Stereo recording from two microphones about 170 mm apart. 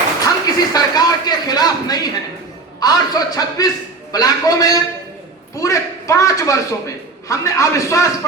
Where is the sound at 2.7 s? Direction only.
20° left (ahead or behind).